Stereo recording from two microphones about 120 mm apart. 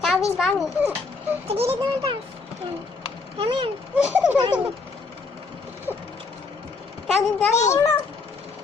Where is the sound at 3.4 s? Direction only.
50° right (ahead or behind).